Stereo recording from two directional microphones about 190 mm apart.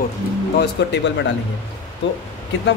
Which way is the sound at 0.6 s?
65° left (ahead or behind).